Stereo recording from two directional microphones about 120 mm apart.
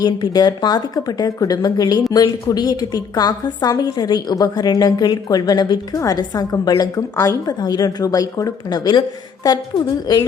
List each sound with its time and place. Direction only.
0.0 s a woman's voice: 35° left (ahead or behind)